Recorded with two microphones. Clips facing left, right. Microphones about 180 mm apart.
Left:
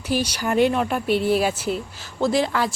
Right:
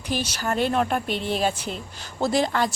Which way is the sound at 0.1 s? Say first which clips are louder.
Left 4 dB; 10° left (ahead or behind).